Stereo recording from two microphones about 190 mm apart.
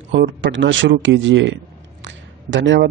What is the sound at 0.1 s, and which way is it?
Speech, 70° right (ahead or behind).